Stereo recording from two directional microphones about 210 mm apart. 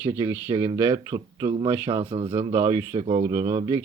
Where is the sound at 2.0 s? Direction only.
30° right (ahead or behind).